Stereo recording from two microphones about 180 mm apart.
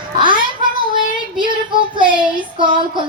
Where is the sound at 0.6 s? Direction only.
25° right (ahead or behind).